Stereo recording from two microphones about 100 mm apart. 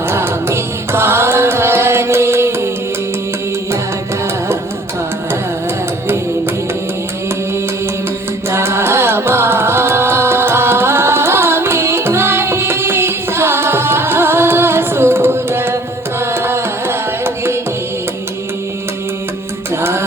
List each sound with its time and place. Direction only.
0.1 s music: 25° right (ahead or behind)
8.4 s music: 25° right (ahead or behind)
16.2 s carnatic music: 25° right (ahead or behind)
19.7 s music: 25° right (ahead or behind)